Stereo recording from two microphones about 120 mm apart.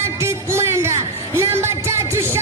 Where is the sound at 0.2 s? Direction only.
20° right (ahead or behind).